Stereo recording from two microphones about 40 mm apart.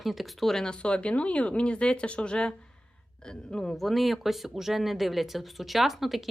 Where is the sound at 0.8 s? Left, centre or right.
Left.